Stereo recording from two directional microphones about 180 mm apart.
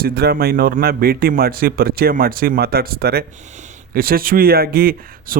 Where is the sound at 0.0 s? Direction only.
60° right (ahead or behind).